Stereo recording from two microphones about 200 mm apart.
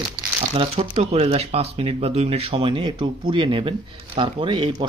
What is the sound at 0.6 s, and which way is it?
Speech, 30° right (ahead or behind).